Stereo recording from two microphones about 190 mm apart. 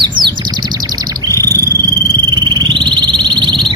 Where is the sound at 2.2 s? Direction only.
25° right (ahead or behind).